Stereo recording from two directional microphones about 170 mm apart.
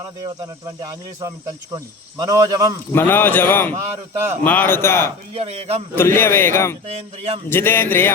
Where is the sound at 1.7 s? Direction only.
20° right (ahead or behind).